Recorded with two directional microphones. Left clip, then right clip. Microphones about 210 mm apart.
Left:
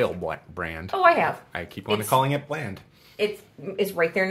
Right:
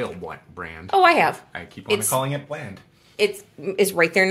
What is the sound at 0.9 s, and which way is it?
Speech, 50° right (ahead or behind).